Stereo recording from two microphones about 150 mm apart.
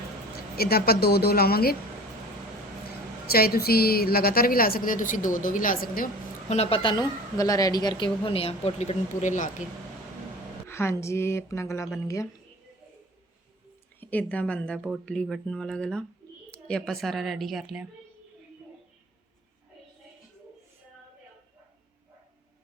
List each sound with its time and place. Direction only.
0.5 s speech: 90° left
3.2 s a woman's voice: 90° left; by 6.1 s 70° left (ahead or behind)
6.5 s a woman's voice: 40° left (ahead or behind)
10.7 s speech: 15° left (ahead or behind)
14.0 s speech: 10° left (ahead or behind)